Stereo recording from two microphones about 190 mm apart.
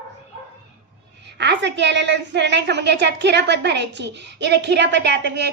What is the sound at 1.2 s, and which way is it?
A woman's voice, 65° right (ahead or behind).